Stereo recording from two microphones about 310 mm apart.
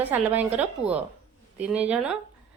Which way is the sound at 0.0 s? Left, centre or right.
Centre.